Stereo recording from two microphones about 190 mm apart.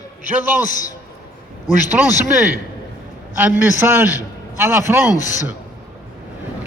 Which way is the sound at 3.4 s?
10° right (ahead or behind).